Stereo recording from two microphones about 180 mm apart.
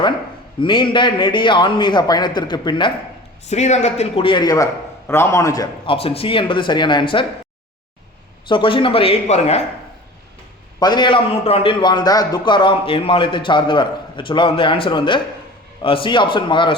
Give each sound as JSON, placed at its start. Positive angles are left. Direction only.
{"t": 0.6, "sound": "a man's voice", "side_deg": 25}
{"t": 3.5, "sound": "a man's voice", "side_deg": 40}
{"t": 5.8, "sound": "a man's voice", "side_deg": 30}
{"t": 8.4, "sound": "speech", "side_deg": 30}
{"t": 10.8, "sound": "a man's voice", "side_deg": 25}